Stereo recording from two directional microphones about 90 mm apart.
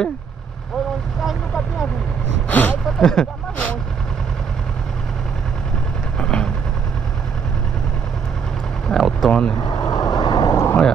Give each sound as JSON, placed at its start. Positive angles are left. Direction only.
{"t": 2.5, "sound": "a sound", "side_deg": 20}
{"t": 3.0, "sound": "speech", "side_deg": 5}
{"t": 6.1, "sound": "vehicle", "side_deg": 10}
{"t": 8.8, "sound": "a sound", "side_deg": 5}
{"t": 9.7, "sound": "vehicle", "side_deg": 45}
{"t": 10.5, "sound": "vehicle", "side_deg": 30}